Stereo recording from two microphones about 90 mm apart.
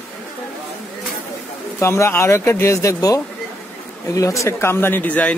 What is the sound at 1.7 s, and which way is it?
Speech, 30° left (ahead or behind).